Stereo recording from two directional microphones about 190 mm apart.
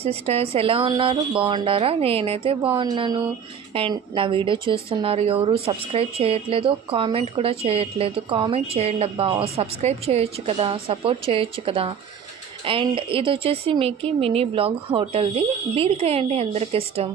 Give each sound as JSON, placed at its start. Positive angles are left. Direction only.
{"t": 0.0, "sound": "speech", "side_deg": -30}